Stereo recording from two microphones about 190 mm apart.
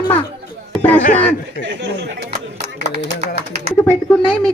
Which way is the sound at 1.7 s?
65° right (ahead or behind).